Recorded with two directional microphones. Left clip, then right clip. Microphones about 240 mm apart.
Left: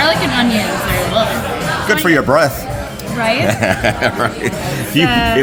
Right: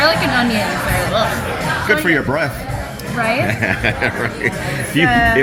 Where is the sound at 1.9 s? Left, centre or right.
Centre.